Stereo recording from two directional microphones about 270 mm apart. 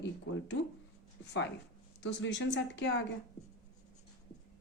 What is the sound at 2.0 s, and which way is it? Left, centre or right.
Speech, left.